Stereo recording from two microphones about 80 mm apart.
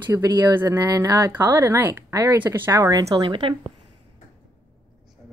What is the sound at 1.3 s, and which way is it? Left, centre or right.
A woman's voice, right.